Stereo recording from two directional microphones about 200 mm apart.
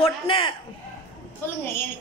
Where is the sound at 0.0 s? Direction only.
25° left (ahead or behind).